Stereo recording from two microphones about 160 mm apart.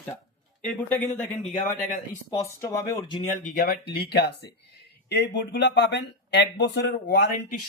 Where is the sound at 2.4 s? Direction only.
20° left (ahead or behind).